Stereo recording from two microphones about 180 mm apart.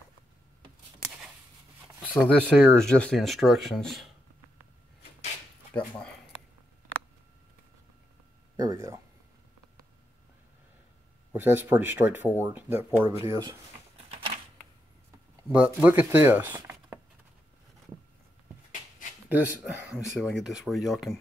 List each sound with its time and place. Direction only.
2.1 s speech: centre (ahead or behind)
5.7 s speech: 10° left (ahead or behind)
8.5 s speech: 15° right (ahead or behind)
11.3 s speech: 10° right (ahead or behind)
13.9 s typewriter: 35° right (ahead or behind)
15.5 s speech: 5° right (ahead or behind)
19.2 s speech: 10° right (ahead or behind)